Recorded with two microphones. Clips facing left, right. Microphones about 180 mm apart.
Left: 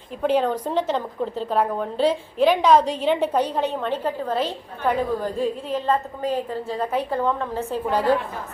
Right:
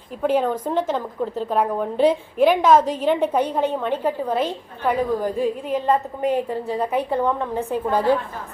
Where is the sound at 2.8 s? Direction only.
45° right (ahead or behind).